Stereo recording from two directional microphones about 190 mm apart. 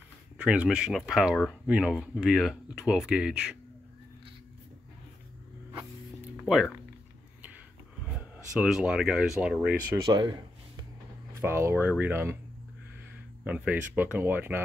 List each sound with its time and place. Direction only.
0.4 s speech: 5° right (ahead or behind)
6.4 s speech: centre (ahead or behind)
8.2 s speech: 5° right (ahead or behind)
10.0 s speech: 25° right (ahead or behind)
11.3 s speech: 15° right (ahead or behind)
13.4 s speech: 10° right (ahead or behind)